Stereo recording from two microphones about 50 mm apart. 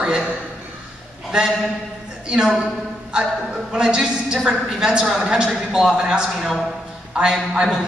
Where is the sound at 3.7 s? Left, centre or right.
Centre.